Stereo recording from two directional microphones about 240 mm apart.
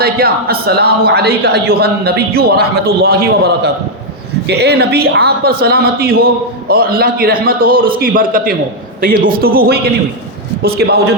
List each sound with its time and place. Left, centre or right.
0.0 s a man's voice: right